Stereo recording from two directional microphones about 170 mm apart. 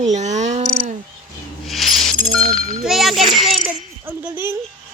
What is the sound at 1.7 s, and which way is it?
Music, centre (ahead or behind).